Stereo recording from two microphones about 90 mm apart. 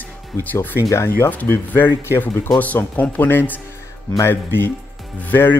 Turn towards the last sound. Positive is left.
turn(degrees=25)  # may be behind; listen again after turning